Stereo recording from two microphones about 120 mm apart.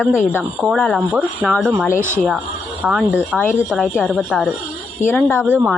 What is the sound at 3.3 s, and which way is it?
Speech, 15° left (ahead or behind).